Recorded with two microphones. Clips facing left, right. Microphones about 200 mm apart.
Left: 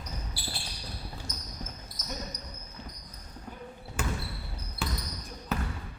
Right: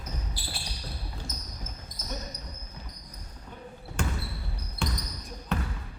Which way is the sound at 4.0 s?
5° left (ahead or behind).